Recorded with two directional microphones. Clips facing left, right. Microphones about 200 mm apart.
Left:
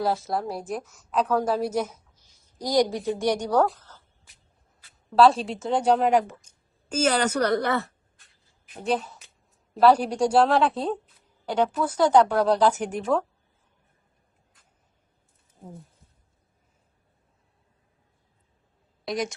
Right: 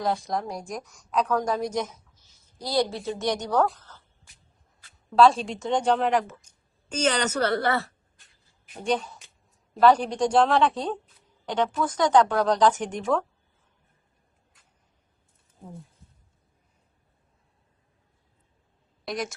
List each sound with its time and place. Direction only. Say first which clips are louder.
0.0 s a woman's voice: left 1 dB; 5° left (ahead or behind)
4.8 s a sound: even; 5° left (ahead or behind)
5.4 s speech: left 1 dB; 5° left (ahead or behind)
8.8 s a woman's voice: even; 5° left (ahead or behind)
19.0 s a woman's voice: left 3 dB; centre (ahead or behind)